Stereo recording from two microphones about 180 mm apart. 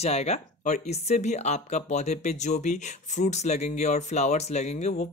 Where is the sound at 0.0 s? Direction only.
35° left (ahead or behind).